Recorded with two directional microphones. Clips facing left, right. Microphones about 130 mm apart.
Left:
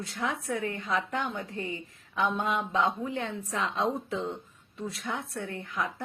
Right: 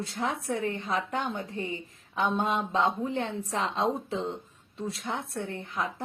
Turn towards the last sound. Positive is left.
turn(degrees=-30)  # may be behind; listen again after turning